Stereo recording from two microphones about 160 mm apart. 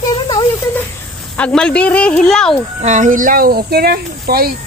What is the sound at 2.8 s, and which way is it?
Speech, 50° right (ahead or behind).